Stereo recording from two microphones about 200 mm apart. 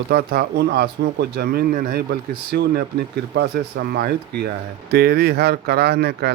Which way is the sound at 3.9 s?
55° right (ahead or behind).